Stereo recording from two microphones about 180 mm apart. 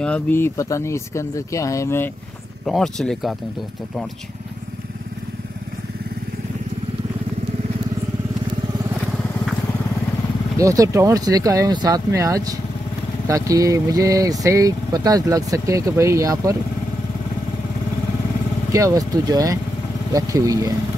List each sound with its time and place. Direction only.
0.0 s speech: 10° left (ahead or behind)
2.6 s speech: centre (ahead or behind)
10.6 s speech: 20° right (ahead or behind)
18.7 s speech: 15° right (ahead or behind)